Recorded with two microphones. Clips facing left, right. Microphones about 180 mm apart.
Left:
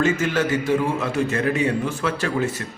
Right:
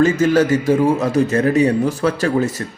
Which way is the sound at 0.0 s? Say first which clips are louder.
Right 7 dB; 40° right (ahead or behind).